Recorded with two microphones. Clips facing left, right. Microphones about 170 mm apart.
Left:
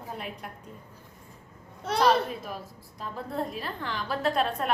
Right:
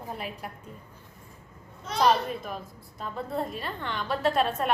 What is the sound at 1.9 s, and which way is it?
Speech, 65° left (ahead or behind).